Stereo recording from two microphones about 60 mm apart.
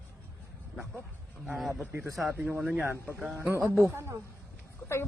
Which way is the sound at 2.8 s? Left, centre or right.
Right.